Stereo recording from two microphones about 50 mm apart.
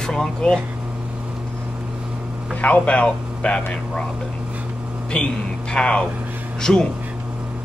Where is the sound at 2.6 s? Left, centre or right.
Left.